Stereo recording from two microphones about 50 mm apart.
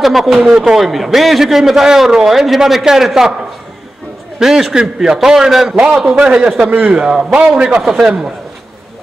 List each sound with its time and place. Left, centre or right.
0.0 s a man's voice: centre
4.4 s a man's voice: centre
6.7 s a man's voice: right
7.0 s a man's voice: centre
7.8 s a man's voice: centre